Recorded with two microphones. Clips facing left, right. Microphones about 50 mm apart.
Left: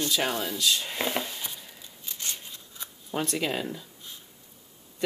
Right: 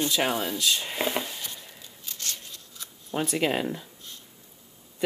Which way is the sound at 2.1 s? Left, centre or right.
Centre.